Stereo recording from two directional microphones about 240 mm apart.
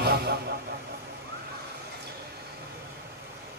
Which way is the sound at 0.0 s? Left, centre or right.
Right.